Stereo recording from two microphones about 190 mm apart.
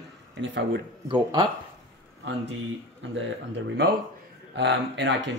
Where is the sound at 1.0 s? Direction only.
25° right (ahead or behind).